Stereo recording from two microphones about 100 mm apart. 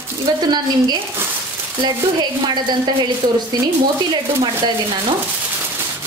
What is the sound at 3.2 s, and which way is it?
Speech, 50° right (ahead or behind).